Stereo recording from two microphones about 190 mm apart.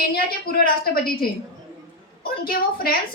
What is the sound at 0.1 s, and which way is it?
A woman's voice, 50° left (ahead or behind).